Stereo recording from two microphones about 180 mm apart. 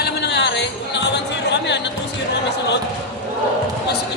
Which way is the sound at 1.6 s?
75° left (ahead or behind).